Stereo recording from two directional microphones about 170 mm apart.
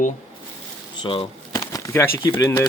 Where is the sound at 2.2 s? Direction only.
30° left (ahead or behind).